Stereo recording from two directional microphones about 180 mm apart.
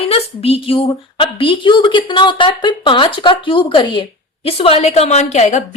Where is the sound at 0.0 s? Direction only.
35° left (ahead or behind).